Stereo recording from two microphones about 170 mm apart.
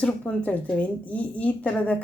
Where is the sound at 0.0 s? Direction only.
5° left (ahead or behind).